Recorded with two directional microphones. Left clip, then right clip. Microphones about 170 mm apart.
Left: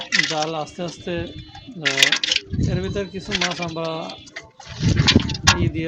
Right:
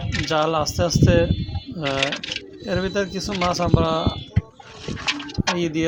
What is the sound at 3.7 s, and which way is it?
Speech, 20° right (ahead or behind).